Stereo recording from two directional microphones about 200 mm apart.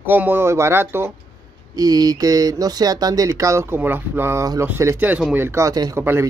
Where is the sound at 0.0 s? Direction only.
10° right (ahead or behind).